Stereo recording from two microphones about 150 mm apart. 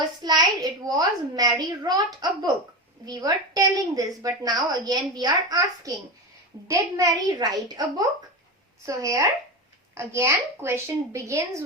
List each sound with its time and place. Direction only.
0.2 s a woman's voice: 25° right (ahead or behind)